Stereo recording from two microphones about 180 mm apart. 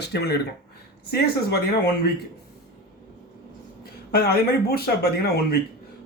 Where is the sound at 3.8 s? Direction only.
60° left (ahead or behind).